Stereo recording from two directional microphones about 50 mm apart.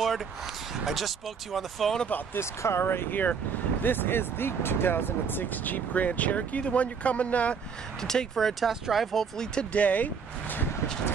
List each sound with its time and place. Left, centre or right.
0.8 s speech: centre
2.3 s speech: left
8.0 s speech: centre
9.4 s speech: left